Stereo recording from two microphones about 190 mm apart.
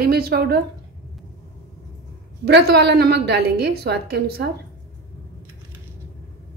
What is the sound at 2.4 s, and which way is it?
A woman's voice, 60° right (ahead or behind).